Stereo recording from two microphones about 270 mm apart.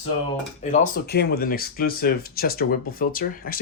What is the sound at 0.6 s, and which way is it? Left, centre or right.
Speech, left.